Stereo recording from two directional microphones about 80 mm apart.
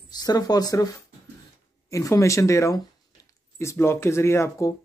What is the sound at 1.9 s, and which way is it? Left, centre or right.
Speech, left.